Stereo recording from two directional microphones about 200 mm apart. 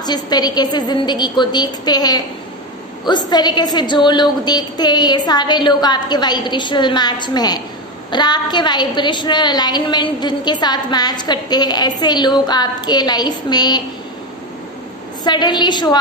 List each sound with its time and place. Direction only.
0.0 s a woman's voice: 20° left (ahead or behind)
15.2 s a woman's voice: 20° left (ahead or behind)